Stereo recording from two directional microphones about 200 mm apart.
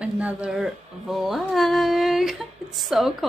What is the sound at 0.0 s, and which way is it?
Speech, 5° right (ahead or behind).